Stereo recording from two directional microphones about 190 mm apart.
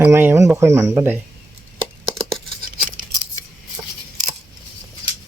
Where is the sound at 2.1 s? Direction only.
Centre (ahead or behind).